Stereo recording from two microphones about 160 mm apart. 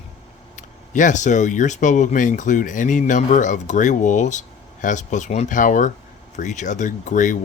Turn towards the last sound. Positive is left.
turn(degrees=50)  # may be behind; listen again after turning